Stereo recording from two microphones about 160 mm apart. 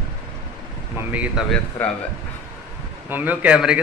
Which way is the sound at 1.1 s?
10° right (ahead or behind).